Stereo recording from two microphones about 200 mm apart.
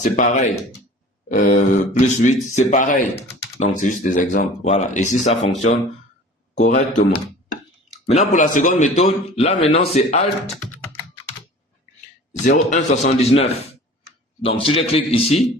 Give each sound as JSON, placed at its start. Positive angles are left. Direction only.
{"t": 0.0, "sound": "a man's voice", "side_deg": 40}
{"t": 12.5, "sound": "a man's voice", "side_deg": 40}